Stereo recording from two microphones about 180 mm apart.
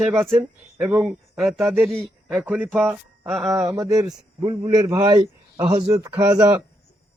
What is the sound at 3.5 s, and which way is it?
A man's voice, 20° right (ahead or behind).